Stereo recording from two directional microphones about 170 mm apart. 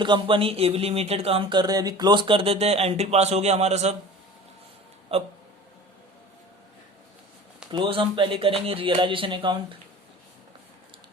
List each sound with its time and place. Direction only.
0.0 s speech: 30° right (ahead or behind)
5.1 s speech: 35° right (ahead or behind)
7.7 s speech: 30° right (ahead or behind)